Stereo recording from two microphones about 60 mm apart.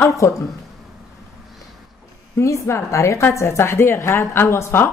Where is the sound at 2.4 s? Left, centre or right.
Left.